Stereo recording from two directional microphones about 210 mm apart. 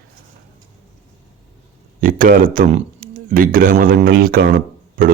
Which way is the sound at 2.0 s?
40° right (ahead or behind).